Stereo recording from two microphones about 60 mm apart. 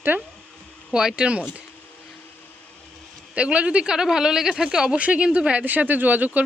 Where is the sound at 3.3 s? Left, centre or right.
Right.